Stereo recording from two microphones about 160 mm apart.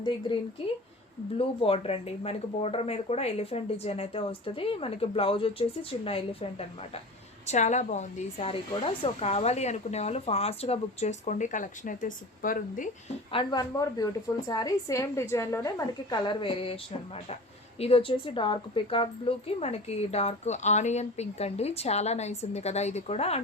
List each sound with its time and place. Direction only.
1.4 s a woman's voice: 35° left (ahead or behind)
7.4 s speech: 45° left (ahead or behind)
13.3 s a woman's voice: 30° left (ahead or behind)